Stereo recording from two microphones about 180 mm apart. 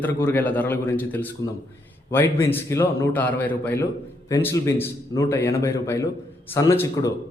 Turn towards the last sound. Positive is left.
turn(degrees=15)  # may be behind; listen again after turning